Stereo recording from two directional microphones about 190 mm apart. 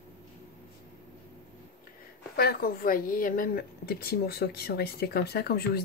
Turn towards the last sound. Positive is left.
turn(degrees=55)  # may be behind; listen again after turning